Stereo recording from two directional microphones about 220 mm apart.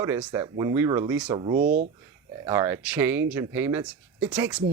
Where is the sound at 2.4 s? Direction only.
15° right (ahead or behind).